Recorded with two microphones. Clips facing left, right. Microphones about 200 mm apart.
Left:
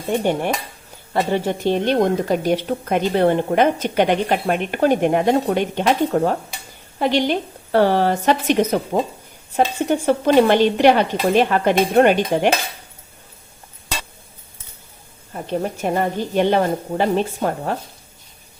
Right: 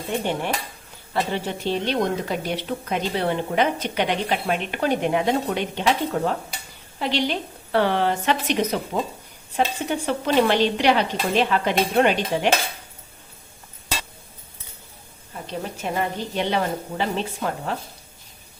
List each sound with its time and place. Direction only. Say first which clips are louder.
1.1 s a woman's voice: left 6 dB; 45° left (ahead or behind)
15.3 s a woman's voice: left 8 dB; 50° left (ahead or behind)